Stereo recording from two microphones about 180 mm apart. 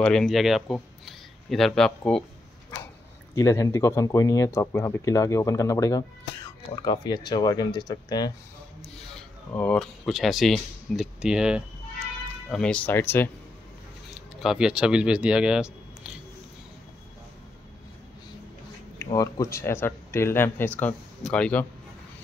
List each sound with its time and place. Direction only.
0.0 s speech: 5° left (ahead or behind)
3.3 s speech: 20° left (ahead or behind)
9.5 s speech: 5° left (ahead or behind)
12.4 s speech: 5° left (ahead or behind)
14.4 s speech: 5° right (ahead or behind)
19.1 s speech: 20° left (ahead or behind)